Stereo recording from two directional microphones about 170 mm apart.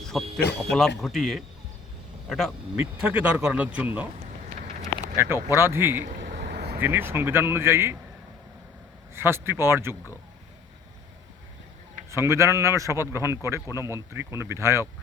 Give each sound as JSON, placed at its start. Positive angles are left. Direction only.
{"t": 0.0, "sound": "a sound", "side_deg": 0}
{"t": 0.7, "sound": "speech", "side_deg": 0}
{"t": 2.7, "sound": "a man's voice", "side_deg": -10}
{"t": 5.1, "sound": "a man's voice", "side_deg": -15}
{"t": 6.2, "sound": "vehicle", "side_deg": -75}
{"t": 6.7, "sound": "a man's voice", "side_deg": -10}
{"t": 9.1, "sound": "a man's voice", "side_deg": -15}
{"t": 12.1, "sound": "a man's voice", "side_deg": -15}